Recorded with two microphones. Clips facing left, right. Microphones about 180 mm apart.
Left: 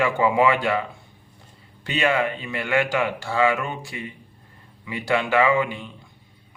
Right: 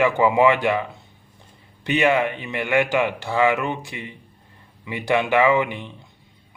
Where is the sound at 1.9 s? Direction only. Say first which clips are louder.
Right 3 dB; 20° right (ahead or behind).